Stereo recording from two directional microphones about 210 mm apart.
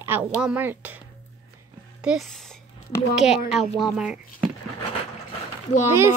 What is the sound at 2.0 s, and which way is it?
A woman's voice, centre (ahead or behind).